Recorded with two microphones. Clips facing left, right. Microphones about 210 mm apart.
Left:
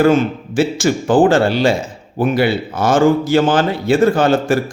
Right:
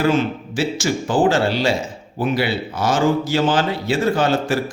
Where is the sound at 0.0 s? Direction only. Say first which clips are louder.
Left 5 dB; 50° left (ahead or behind).